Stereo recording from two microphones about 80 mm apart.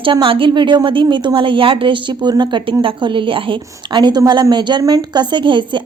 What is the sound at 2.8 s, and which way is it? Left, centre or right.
A woman's voice, right.